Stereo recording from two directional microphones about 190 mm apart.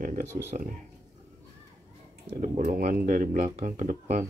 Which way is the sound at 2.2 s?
40° right (ahead or behind).